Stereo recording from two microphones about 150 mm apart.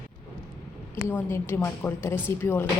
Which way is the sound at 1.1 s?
15° left (ahead or behind).